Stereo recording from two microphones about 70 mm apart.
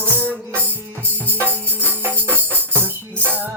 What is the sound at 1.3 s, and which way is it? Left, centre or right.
Music, right.